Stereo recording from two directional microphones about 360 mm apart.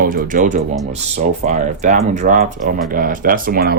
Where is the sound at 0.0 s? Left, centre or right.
Right.